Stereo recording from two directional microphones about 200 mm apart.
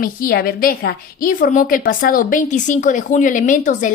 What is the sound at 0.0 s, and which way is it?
A woman's voice, 45° left (ahead or behind).